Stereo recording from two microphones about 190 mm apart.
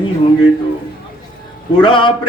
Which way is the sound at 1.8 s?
25° left (ahead or behind).